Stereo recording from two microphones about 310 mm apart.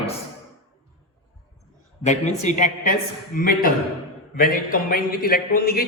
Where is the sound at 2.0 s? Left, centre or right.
Left.